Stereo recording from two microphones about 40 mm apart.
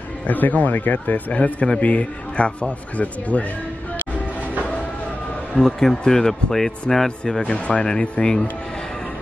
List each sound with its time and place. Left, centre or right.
0.3 s speech: left
1.3 s a man's voice: left
5.7 s speech: centre
7.5 s a man's voice: left
8.2 s speech: centre